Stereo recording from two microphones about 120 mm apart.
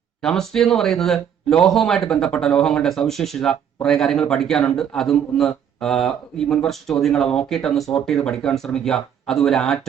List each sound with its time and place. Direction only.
0.2 s speech: 5° left (ahead or behind)